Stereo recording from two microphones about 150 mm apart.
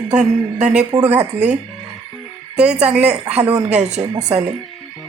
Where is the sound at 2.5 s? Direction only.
5° right (ahead or behind).